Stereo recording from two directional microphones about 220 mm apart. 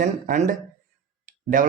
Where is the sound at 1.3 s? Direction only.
35° right (ahead or behind).